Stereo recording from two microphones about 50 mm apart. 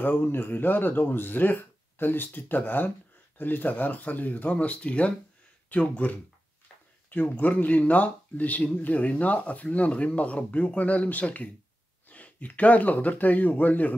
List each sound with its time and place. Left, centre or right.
0.0 s speech: left